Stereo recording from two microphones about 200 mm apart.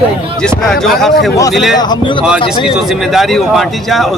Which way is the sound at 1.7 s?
20° left (ahead or behind).